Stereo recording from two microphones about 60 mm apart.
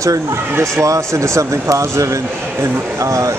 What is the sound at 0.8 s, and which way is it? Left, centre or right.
Speech, right.